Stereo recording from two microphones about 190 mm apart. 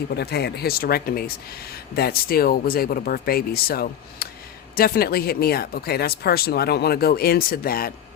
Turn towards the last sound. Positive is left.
turn(degrees=50)  # may be behind; listen again after turning